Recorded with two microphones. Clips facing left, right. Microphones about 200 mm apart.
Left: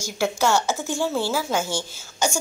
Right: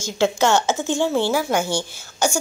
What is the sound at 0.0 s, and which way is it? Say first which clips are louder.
A woman's voice: right 4 dB; 20° right (ahead or behind).